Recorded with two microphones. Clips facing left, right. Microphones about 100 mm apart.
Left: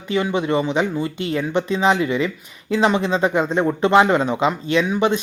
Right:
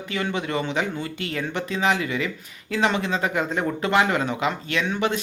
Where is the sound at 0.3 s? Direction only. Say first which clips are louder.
Left 6 dB; 20° left (ahead or behind).